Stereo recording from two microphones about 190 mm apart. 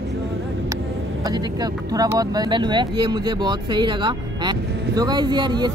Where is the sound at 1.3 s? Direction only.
20° right (ahead or behind).